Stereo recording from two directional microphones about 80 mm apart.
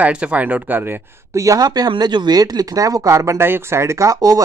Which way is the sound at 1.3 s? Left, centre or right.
Right.